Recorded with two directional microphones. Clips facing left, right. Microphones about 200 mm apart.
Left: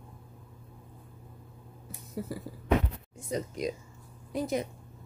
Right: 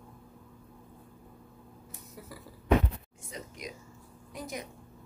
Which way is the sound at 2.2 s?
30° left (ahead or behind).